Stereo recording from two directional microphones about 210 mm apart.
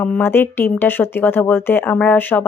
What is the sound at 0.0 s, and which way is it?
Speech, 10° left (ahead or behind).